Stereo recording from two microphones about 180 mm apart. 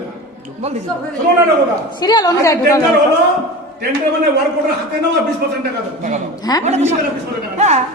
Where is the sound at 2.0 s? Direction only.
20° left (ahead or behind).